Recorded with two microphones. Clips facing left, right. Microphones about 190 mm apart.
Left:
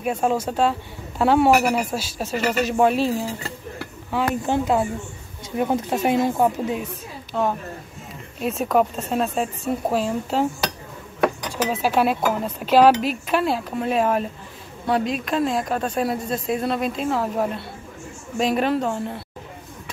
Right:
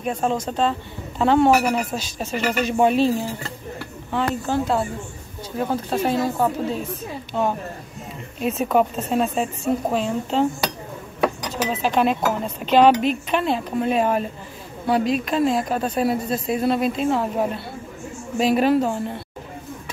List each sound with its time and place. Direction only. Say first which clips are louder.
0.0 s speech: left 1 dB; 5° left (ahead or behind)
8.4 s speech: right 1 dB; centre (ahead or behind)
11.5 s speech: even; 10° left (ahead or behind)